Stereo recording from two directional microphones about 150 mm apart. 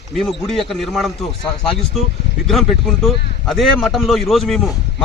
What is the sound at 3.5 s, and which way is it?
A man's voice, centre (ahead or behind).